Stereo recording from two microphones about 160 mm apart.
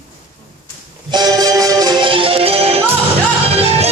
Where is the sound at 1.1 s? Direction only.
25° right (ahead or behind).